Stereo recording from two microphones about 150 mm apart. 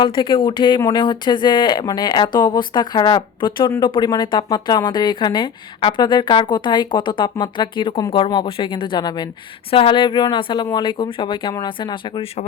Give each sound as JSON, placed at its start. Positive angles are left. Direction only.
{"t": 0.0, "sound": "speech", "side_deg": 30}